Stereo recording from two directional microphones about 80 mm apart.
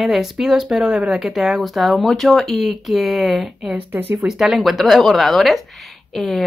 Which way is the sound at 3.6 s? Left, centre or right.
Right.